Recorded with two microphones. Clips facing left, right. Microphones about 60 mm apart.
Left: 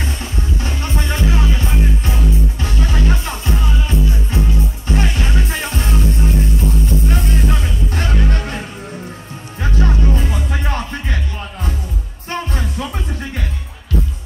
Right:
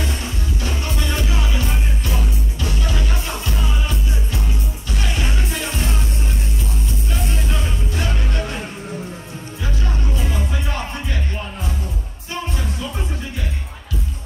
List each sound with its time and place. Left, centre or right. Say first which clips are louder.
0.0 s music: left 1 dB; left
9.6 s music: left 7 dB; left
12.3 s music: left 3 dB; left